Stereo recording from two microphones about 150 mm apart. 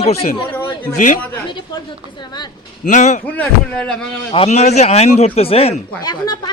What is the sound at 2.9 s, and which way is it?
Speech, 55° left (ahead or behind).